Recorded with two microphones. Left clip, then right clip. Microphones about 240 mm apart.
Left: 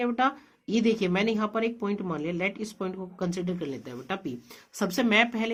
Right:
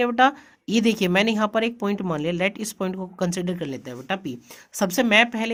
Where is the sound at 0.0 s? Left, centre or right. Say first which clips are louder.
Right 8 dB; right.